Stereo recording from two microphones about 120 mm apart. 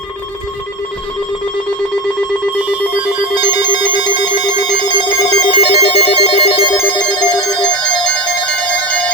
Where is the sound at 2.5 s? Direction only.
10° right (ahead or behind).